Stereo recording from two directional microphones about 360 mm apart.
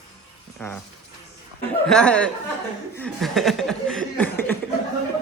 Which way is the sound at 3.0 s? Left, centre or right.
Centre.